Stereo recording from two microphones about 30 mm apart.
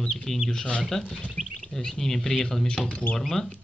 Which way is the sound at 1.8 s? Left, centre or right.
Centre.